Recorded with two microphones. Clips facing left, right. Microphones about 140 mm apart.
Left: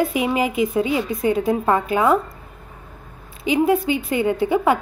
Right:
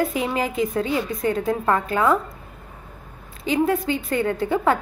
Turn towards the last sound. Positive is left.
turn(degrees=15)  # may be behind; listen again after turning